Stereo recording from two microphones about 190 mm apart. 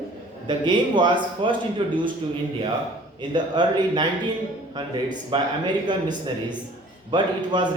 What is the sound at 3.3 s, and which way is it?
Speech, 25° right (ahead or behind).